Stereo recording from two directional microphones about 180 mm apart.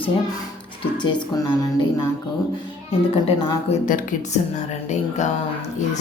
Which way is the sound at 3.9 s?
45° left (ahead or behind).